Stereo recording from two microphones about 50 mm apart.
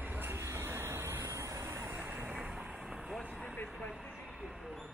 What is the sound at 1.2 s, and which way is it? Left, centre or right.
Vehicle, right.